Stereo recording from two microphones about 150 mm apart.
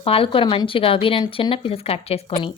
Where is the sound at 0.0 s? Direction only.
40° left (ahead or behind).